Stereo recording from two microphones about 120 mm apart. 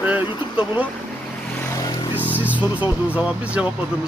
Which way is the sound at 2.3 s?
15° right (ahead or behind).